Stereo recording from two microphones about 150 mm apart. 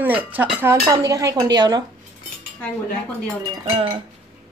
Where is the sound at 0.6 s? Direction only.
20° right (ahead or behind).